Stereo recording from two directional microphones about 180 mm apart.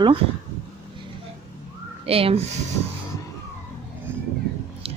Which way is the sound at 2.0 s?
35° right (ahead or behind).